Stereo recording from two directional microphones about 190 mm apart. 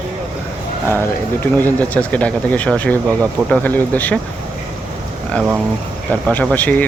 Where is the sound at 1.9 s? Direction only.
5° left (ahead or behind).